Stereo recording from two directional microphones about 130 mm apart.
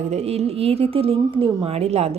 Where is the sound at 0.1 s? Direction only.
55° right (ahead or behind).